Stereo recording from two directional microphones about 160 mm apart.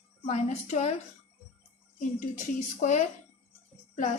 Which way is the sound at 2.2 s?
55° left (ahead or behind).